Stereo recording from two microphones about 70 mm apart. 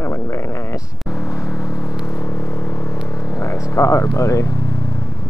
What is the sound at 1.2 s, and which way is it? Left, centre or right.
Vehicle, left.